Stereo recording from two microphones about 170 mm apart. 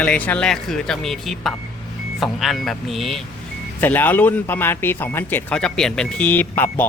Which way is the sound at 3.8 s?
10° left (ahead or behind).